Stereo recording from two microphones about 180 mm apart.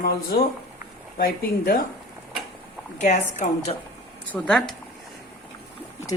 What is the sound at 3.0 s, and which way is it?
Speech, 40° left (ahead or behind).